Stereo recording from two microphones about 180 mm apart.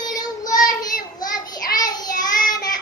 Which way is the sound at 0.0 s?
20° left (ahead or behind).